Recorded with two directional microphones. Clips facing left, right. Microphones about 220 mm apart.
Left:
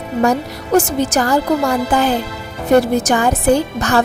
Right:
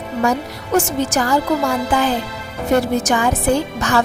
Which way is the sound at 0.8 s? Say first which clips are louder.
Left 2 dB; 40° left (ahead or behind).